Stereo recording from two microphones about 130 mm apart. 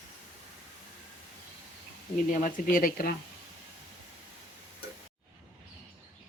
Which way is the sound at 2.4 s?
90° left.